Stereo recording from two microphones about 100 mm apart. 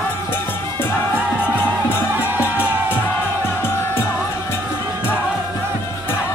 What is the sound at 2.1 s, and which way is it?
Music, 20° right (ahead or behind).